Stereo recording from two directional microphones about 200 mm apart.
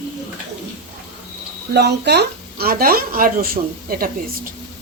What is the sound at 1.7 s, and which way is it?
Speech, 55° right (ahead or behind).